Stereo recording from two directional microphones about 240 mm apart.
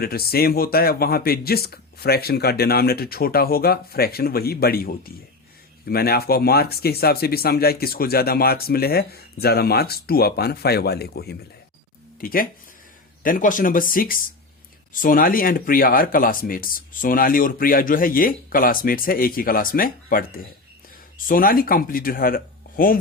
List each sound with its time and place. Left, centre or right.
0.0 s speech: left